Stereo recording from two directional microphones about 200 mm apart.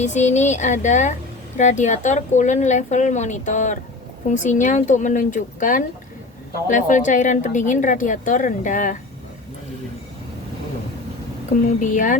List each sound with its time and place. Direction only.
0.0 s a woman's voice: 35° left (ahead or behind)
11.8 s a woman's voice: 40° left (ahead or behind)